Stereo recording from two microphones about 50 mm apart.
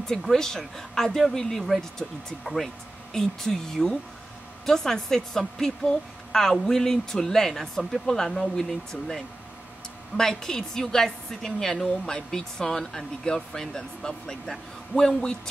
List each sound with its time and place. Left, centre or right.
0.0 s speech: centre